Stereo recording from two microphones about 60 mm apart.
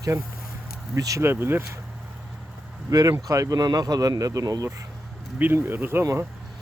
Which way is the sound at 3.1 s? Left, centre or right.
Right.